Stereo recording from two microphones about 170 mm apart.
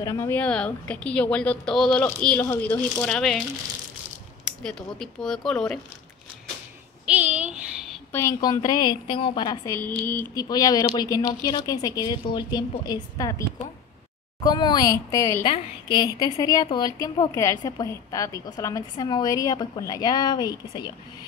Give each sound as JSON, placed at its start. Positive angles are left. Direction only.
{"t": 0.0, "sound": "speech", "side_deg": 15}
{"t": 4.9, "sound": "speech", "side_deg": 0}
{"t": 7.1, "sound": "a sound", "side_deg": -10}
{"t": 8.1, "sound": "a woman's voice", "side_deg": 15}
{"t": 9.7, "sound": "a woman's voice", "side_deg": 10}
{"t": 14.4, "sound": "a woman's voice", "side_deg": 25}